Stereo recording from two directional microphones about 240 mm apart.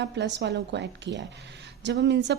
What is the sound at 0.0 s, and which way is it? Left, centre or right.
A woman's voice, right.